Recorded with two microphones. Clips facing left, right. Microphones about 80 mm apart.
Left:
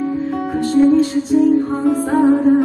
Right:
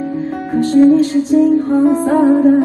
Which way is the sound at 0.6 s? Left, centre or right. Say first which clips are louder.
Right 4 dB; right.